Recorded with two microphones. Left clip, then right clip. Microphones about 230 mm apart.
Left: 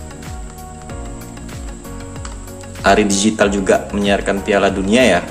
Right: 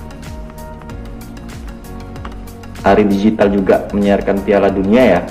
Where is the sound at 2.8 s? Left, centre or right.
Centre.